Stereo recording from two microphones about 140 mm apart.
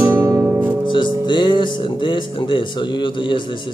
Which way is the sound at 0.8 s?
35° left (ahead or behind).